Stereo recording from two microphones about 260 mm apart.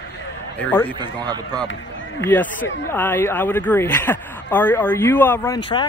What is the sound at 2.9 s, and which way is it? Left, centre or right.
Speech, centre.